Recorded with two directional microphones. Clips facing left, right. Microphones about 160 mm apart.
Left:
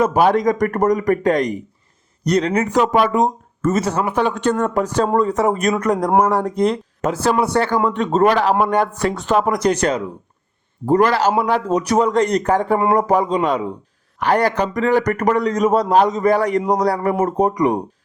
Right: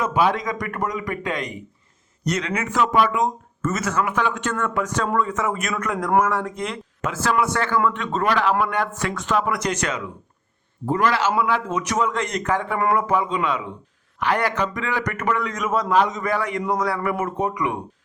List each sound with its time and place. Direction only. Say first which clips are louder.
0.0 s speech: left 6 dB; 40° left (ahead or behind)